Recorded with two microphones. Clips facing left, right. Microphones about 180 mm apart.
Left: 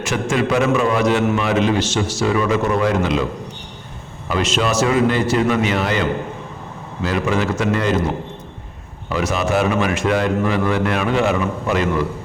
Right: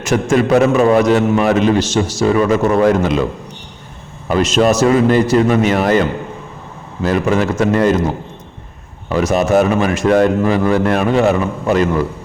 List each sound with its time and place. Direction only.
0.0 s a man's voice: 45° right (ahead or behind)
4.3 s a man's voice: 40° right (ahead or behind)
9.0 s a man's voice: 40° right (ahead or behind)